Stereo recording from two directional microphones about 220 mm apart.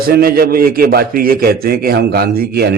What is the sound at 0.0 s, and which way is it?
A man's voice, 40° right (ahead or behind).